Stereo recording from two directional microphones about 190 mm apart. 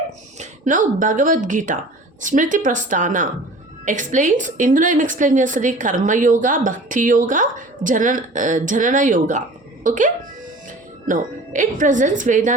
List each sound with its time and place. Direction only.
0.3 s a woman's voice: 40° right (ahead or behind)